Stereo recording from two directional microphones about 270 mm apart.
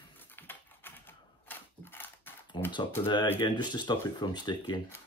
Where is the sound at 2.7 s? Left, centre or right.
Centre.